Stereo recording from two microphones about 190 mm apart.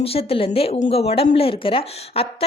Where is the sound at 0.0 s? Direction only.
30° left (ahead or behind).